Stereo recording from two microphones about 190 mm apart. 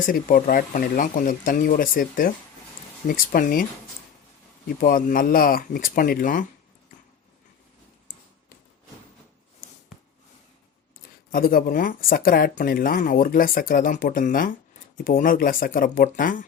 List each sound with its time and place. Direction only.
0.0 s speech: 45° left (ahead or behind)
4.8 s speech: 45° left (ahead or behind)
11.0 s speech: 50° left (ahead or behind)